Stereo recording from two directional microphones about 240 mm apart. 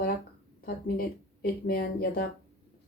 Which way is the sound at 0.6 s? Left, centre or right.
Left.